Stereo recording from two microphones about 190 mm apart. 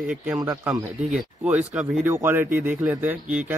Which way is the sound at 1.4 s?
5° right (ahead or behind).